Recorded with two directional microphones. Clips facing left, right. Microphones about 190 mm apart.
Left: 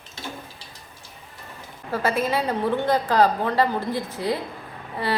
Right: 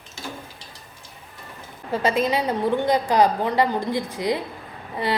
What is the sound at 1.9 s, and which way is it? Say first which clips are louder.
A woman's voice: right 2 dB; 20° right (ahead or behind).